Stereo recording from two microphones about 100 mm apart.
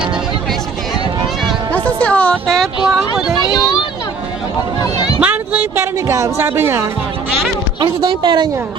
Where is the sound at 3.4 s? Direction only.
45° left (ahead or behind).